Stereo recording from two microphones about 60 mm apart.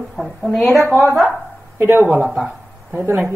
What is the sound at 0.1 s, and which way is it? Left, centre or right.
Speech, centre.